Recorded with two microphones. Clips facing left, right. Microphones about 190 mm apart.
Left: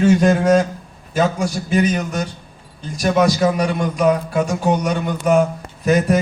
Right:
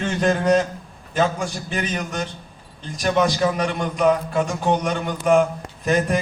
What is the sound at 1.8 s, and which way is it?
Speech, 40° left (ahead or behind).